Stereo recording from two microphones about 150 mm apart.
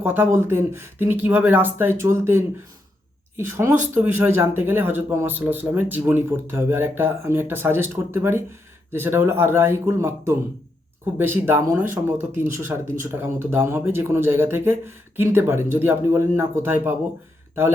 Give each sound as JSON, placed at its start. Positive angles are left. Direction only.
{"t": 0.0, "sound": "speech", "side_deg": -15}